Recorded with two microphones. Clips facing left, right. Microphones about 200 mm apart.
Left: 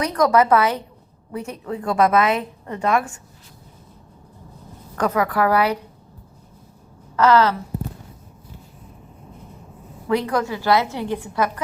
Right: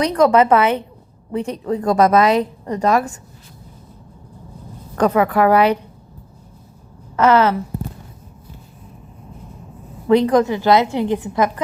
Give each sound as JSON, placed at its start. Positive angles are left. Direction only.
{"t": 0.0, "sound": "a woman's voice", "side_deg": -30}
{"t": 4.9, "sound": "a woman's voice", "side_deg": -30}
{"t": 7.3, "sound": "speech", "side_deg": -15}
{"t": 10.1, "sound": "a woman's voice", "side_deg": -25}